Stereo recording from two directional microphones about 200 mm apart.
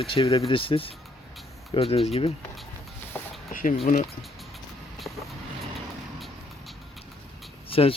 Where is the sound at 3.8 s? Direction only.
35° left (ahead or behind).